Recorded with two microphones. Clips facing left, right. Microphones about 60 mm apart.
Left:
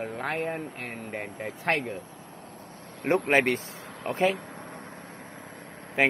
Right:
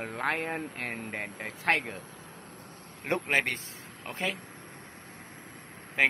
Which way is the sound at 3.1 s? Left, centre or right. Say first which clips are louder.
Left 6 dB; left.